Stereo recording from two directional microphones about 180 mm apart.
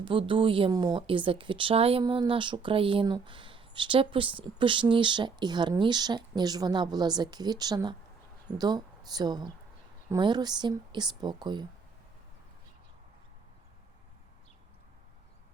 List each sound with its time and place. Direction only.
0.0 s a woman's voice: 30° right (ahead or behind)